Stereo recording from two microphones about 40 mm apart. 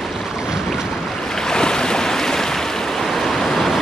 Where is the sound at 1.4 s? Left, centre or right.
Centre.